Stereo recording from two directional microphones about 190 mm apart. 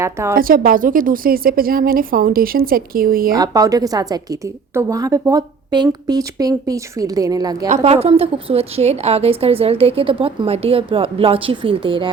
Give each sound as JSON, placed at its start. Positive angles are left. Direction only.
{"t": 0.0, "sound": "a woman's voice", "side_deg": -15}
{"t": 0.3, "sound": "a woman's voice", "side_deg": -50}
{"t": 3.3, "sound": "a woman's voice", "side_deg": -20}
{"t": 7.9, "sound": "a woman's voice", "side_deg": -30}